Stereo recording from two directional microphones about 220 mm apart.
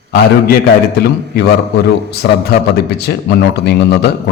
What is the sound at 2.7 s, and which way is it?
Speech, 45° left (ahead or behind).